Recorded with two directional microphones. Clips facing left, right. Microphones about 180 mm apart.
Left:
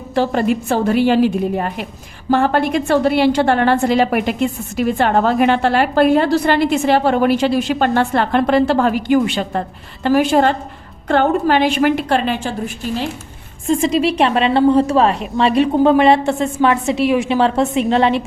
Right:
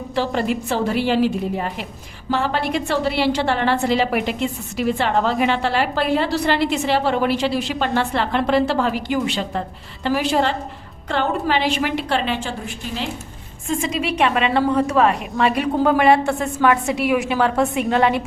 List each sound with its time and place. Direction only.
0.1 s a woman's voice: 45° left (ahead or behind)
13.7 s a woman's voice: 35° left (ahead or behind)